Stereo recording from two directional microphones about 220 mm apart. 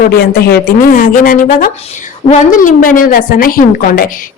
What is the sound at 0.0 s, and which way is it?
A woman's voice, 45° left (ahead or behind).